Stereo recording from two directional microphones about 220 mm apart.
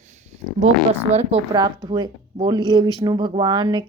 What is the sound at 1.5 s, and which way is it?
A woman's voice, 20° right (ahead or behind).